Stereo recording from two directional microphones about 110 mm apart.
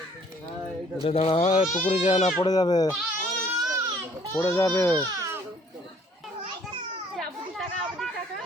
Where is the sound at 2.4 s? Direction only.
35° left (ahead or behind).